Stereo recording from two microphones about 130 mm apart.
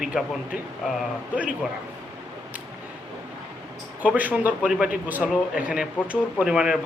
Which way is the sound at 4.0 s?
10° right (ahead or behind).